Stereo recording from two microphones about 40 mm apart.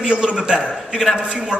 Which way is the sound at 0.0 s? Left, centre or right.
Right.